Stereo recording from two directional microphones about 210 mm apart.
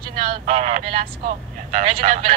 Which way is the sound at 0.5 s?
30° right (ahead or behind).